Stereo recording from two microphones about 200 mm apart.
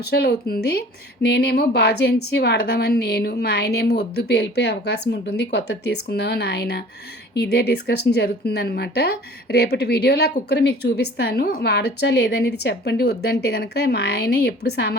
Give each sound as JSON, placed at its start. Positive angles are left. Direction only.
{"t": 0.1, "sound": "a woman's voice", "side_deg": 50}